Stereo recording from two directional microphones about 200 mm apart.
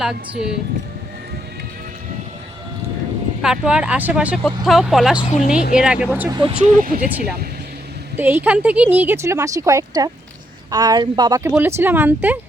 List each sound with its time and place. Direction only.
0.0 s speech: 5° right (ahead or behind)
3.4 s speech: 5° right (ahead or behind)
5.2 s a woman's voice: 35° left (ahead or behind)
5.7 s speech: 5° right (ahead or behind)
6.3 s speech: 25° right (ahead or behind)
6.7 s speech: 45° right (ahead or behind)
8.1 s speech: 10° right (ahead or behind)